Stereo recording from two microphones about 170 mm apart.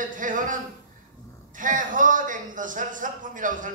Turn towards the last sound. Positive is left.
turn(degrees=-50)  # may be behind; listen again after turning